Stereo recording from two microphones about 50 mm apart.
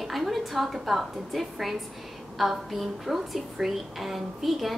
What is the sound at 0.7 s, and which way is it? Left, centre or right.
A woman's voice, centre.